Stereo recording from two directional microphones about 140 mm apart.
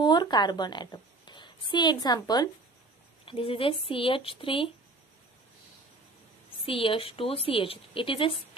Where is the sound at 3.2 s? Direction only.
40° left (ahead or behind).